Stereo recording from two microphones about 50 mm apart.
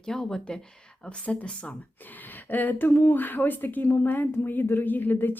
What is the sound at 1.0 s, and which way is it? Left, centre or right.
Speech, left.